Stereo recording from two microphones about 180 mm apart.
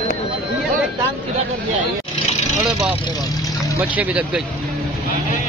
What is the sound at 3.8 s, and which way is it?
Speech, 10° right (ahead or behind).